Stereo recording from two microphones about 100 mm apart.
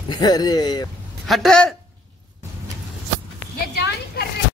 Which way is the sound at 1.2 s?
Centre (ahead or behind).